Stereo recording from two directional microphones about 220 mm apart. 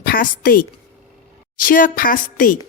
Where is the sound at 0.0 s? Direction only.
40° left (ahead or behind).